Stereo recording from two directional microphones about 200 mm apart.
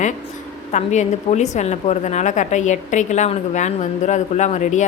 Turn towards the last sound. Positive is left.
turn(degrees=35)  # may be behind; listen again after turning